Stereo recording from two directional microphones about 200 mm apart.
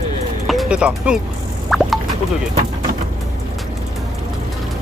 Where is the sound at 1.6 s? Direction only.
Centre (ahead or behind).